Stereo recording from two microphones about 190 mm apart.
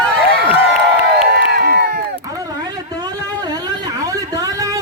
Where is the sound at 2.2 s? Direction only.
20° right (ahead or behind).